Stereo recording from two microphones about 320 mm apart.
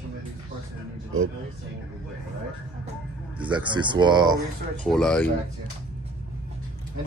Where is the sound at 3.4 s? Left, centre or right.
Centre.